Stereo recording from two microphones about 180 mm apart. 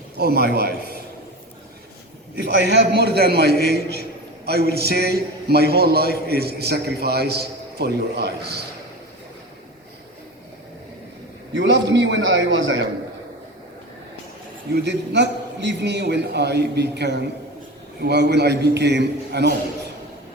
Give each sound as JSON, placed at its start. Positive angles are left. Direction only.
{"t": 0.2, "sound": "a man's voice", "side_deg": -60}
{"t": 2.4, "sound": "a man's voice", "side_deg": -65}
{"t": 11.5, "sound": "a man's voice", "side_deg": -85}
{"t": 14.8, "sound": "a man's voice", "side_deg": -70}